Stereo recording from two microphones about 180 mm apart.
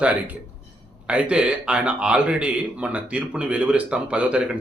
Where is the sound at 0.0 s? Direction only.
10° right (ahead or behind).